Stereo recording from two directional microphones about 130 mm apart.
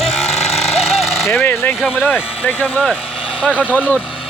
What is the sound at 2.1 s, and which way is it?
Speech, 15° left (ahead or behind).